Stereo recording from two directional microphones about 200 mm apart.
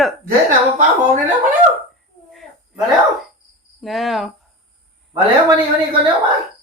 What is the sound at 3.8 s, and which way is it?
Speech, centre (ahead or behind).